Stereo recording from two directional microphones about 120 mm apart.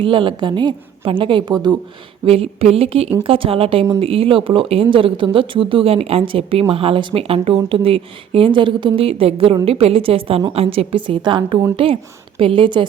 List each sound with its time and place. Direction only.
0.0 s speech: 45° right (ahead or behind)
2.2 s a woman's voice: 55° right (ahead or behind)